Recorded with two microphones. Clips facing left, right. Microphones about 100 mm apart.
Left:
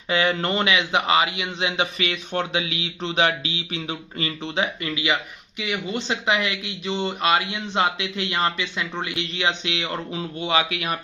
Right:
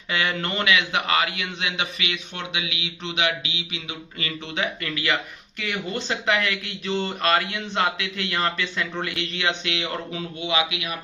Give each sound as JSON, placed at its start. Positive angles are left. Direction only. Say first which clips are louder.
{"t": 0.1, "sound": "a man's voice", "louder": "left 4 dB", "side_deg": 30}
{"t": 10.4, "sound": "a man's voice", "louder": "left 2 dB", "side_deg": 40}